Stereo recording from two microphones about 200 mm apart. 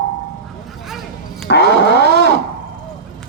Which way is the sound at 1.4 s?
55° left (ahead or behind).